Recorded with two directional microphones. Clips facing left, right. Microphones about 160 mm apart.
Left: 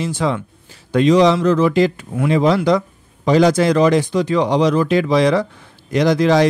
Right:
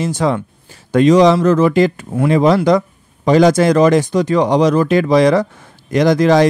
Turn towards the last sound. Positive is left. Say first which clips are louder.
# right 3 dB
turn(degrees=-50)  # may be behind; listen again after turning